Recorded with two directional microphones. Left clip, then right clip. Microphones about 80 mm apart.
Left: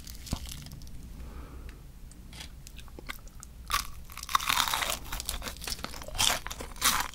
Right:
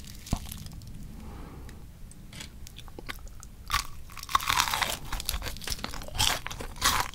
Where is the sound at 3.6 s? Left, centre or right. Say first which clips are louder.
Right 1 dB; centre.